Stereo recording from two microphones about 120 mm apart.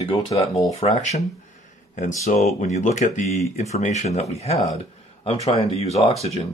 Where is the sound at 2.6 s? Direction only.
85° left.